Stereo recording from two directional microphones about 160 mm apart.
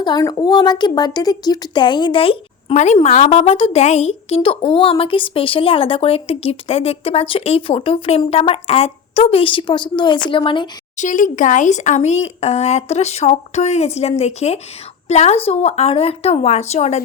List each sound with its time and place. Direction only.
0.0 s a woman's voice: 25° left (ahead or behind)
10.9 s a woman's voice: 50° left (ahead or behind)